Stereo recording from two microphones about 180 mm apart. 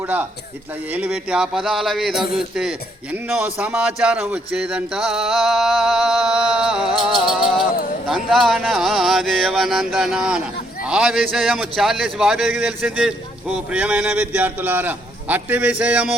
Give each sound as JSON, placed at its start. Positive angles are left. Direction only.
{"t": 0.0, "sound": "speech", "side_deg": -10}